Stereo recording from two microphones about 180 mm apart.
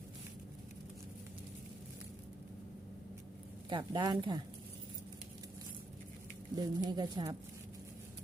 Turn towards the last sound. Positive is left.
turn(degrees=-25)  # may be behind; listen again after turning